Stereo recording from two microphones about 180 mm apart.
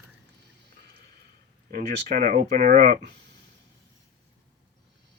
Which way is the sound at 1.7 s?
55° right (ahead or behind).